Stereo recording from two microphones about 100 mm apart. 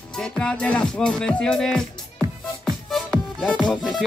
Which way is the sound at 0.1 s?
5° left (ahead or behind).